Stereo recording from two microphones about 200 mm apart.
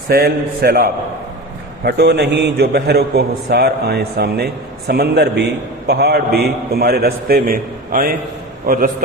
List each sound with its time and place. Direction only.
0.1 s a man's voice: 50° right (ahead or behind)